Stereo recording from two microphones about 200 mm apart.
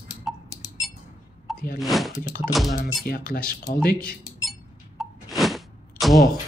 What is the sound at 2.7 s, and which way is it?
Speech, 45° left (ahead or behind).